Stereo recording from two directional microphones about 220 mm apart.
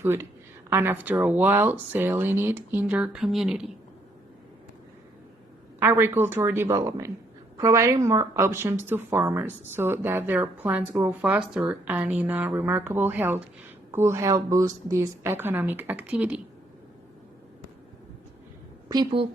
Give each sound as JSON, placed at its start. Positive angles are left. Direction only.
{"t": 0.0, "sound": "a woman's voice", "side_deg": -10}
{"t": 5.8, "sound": "a woman's voice", "side_deg": -10}
{"t": 18.9, "sound": "a woman's voice", "side_deg": -20}